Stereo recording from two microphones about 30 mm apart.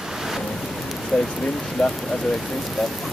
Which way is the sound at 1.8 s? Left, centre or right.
Left.